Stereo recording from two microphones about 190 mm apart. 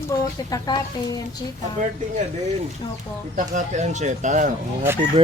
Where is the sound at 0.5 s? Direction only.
20° left (ahead or behind).